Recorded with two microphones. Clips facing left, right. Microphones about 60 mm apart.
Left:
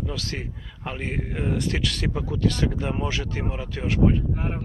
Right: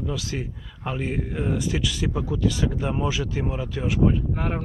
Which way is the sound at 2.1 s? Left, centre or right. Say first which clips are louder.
Right 2 dB; centre.